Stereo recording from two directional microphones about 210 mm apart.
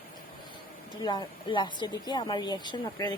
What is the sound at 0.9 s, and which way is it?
Speech, 20° left (ahead or behind).